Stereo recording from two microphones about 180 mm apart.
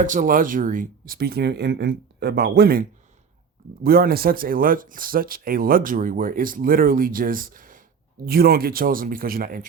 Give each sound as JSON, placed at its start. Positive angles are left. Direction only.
{"t": 0.0, "sound": "speech", "side_deg": -50}
{"t": 3.8, "sound": "speech", "side_deg": -55}